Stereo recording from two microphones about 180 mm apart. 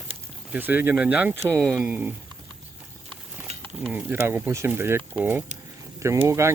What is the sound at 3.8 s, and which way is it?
Speech, 10° right (ahead or behind).